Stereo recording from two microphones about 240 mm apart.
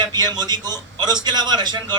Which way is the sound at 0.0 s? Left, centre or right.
Centre.